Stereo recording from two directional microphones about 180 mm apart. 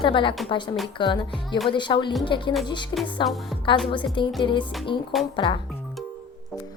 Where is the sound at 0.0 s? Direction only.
25° left (ahead or behind).